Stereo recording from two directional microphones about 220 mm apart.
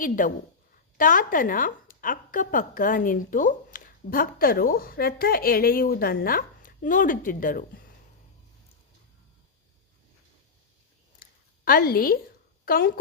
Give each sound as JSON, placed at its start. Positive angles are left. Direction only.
{"t": 0.0, "sound": "a woman's voice", "side_deg": 35}
{"t": 11.2, "sound": "a sound", "side_deg": 40}
{"t": 12.6, "sound": "speech", "side_deg": 40}